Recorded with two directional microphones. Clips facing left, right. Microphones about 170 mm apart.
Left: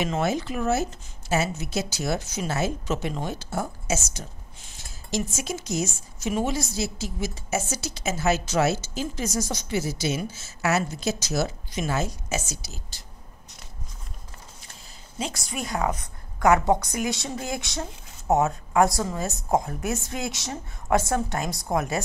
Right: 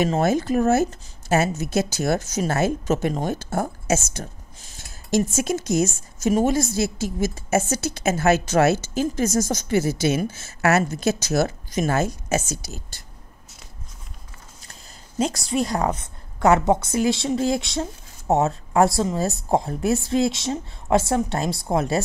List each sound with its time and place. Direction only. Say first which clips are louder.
0.0 s a woman's voice: right 5 dB; 45° right (ahead or behind)
15.1 s a woman's voice: right 9 dB; 40° right (ahead or behind)